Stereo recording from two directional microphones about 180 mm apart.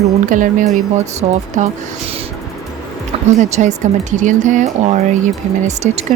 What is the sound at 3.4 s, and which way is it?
Speech, 40° right (ahead or behind).